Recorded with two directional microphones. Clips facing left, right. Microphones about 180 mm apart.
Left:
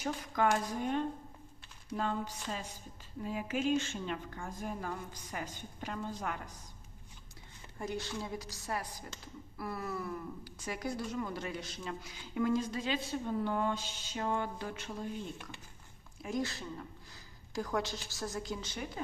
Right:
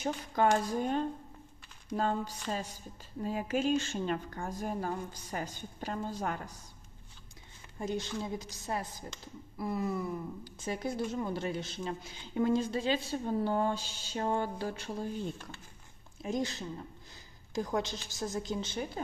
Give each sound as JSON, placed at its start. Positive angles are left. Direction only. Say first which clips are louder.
{"t": 0.0, "sound": "a woman's voice", "louder": "right 3 dB", "side_deg": -35}
{"t": 7.8, "sound": "speech", "louder": "right 3 dB", "side_deg": -20}
{"t": 16.2, "sound": "speech", "louder": "right 2 dB", "side_deg": -20}